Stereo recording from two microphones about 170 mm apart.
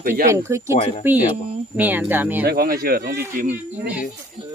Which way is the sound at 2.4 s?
65° right (ahead or behind).